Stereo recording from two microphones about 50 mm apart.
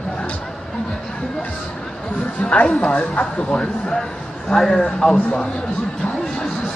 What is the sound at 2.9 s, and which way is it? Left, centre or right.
A man's voice, left.